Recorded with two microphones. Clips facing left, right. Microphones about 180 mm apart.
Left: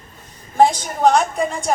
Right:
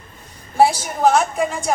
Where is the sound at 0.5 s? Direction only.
10° right (ahead or behind).